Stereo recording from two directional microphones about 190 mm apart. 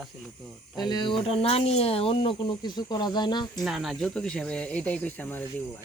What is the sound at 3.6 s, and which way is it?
Speech, centre (ahead or behind).